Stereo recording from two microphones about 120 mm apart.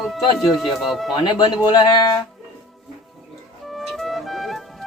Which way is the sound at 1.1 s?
40° left (ahead or behind).